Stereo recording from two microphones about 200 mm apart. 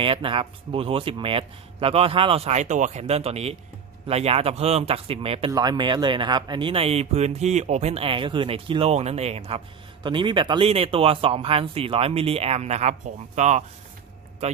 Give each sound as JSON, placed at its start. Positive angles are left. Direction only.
{"t": 0.0, "sound": "speech", "side_deg": -25}